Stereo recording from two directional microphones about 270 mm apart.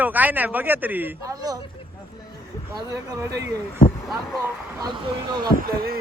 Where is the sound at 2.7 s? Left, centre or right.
Centre.